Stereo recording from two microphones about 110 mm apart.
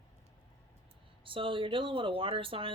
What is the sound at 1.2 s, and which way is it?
Speech, 50° right (ahead or behind).